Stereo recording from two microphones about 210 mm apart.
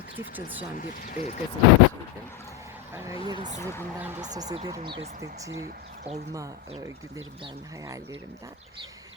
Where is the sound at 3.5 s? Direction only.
10° left (ahead or behind).